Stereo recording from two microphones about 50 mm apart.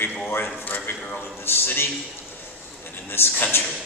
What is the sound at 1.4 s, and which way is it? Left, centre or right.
Speech, left.